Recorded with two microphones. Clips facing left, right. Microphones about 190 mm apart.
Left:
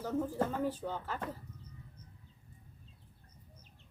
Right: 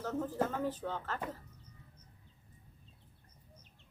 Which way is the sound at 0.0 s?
10° left (ahead or behind).